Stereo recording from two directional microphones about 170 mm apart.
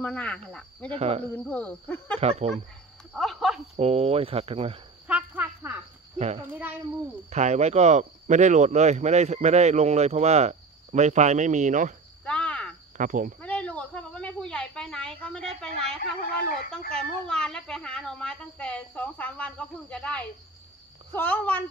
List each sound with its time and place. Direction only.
0.0 s speech: 5° left (ahead or behind)
0.9 s speech: 35° right (ahead or behind)
1.3 s speech: 10° left (ahead or behind)
2.1 s speech: 40° right (ahead or behind)
3.1 s speech: centre (ahead or behind)
3.7 s speech: 35° right (ahead or behind)
5.0 s a sound: 10° right (ahead or behind)
6.1 s a child's voice: 40° right (ahead or behind)
12.3 s cricket: 5° left (ahead or behind)
12.9 s speech: 50° right (ahead or behind)
13.4 s speech: 10° left (ahead or behind)